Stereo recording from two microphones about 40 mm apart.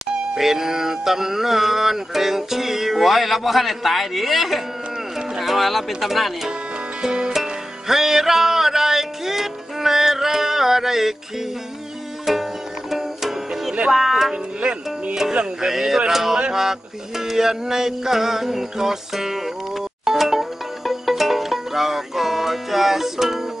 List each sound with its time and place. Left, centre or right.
0.0 s music: centre
5.1 s speech: centre
7.0 s music: centre
13.9 s speech: centre
14.3 s music: right
15.3 s music: centre